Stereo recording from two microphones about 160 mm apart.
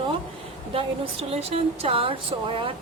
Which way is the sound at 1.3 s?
40° right (ahead or behind).